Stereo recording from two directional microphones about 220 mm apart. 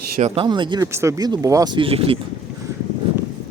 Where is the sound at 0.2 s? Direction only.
30° right (ahead or behind).